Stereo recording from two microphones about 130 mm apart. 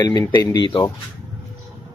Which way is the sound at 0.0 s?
35° left (ahead or behind).